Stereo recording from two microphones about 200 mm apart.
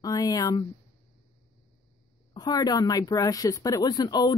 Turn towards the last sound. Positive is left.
turn(degrees=20)  # may be behind; listen again after turning